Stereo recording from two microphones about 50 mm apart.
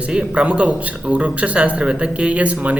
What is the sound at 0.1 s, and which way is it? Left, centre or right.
Speech, right.